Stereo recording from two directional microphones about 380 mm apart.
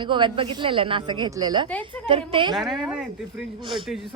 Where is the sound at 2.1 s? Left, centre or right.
Centre.